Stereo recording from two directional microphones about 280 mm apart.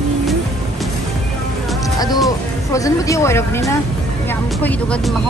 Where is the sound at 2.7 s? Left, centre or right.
Centre.